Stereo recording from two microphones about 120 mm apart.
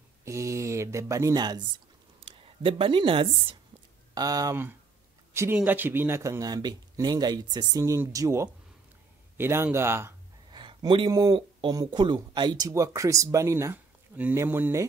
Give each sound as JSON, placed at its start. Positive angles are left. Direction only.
{"t": 0.2, "sound": "speech", "side_deg": -25}
{"t": 2.1, "sound": "speech", "side_deg": -50}
{"t": 4.1, "sound": "speech", "side_deg": -30}
{"t": 10.5, "sound": "a sound", "side_deg": -40}
{"t": 11.1, "sound": "speech", "side_deg": -35}